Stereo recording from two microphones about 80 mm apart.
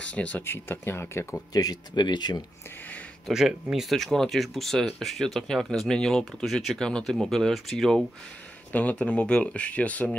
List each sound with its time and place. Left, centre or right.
0.0 s speech: centre
0.4 s speech: left
1.5 s speech: left
3.3 s speech: centre
8.7 s speech: centre